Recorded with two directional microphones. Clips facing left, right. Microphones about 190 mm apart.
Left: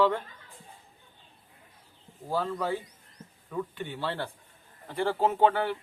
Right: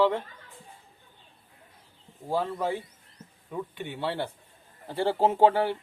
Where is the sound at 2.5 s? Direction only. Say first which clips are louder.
Right 1 dB; 20° right (ahead or behind).